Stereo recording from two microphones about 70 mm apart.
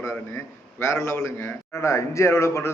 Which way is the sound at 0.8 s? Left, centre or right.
Left.